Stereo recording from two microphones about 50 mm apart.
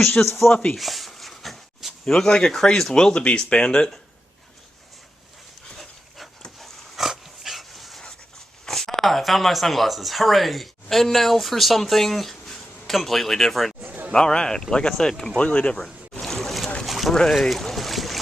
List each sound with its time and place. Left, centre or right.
0.2 s speech: left
0.8 s a sound: centre
2.0 s speech: centre
5.7 s dog: centre
8.6 s speech: centre
13.8 s a sound: right
14.1 s speech: centre
15.4 s speech: left
16.2 s boat: centre